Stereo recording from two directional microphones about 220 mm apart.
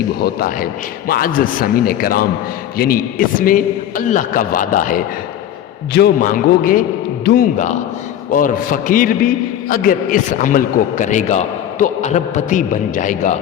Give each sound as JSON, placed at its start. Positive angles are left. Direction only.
{"t": 0.2, "sound": "a man's voice", "side_deg": 45}
{"t": 8.3, "sound": "a man's voice", "side_deg": 40}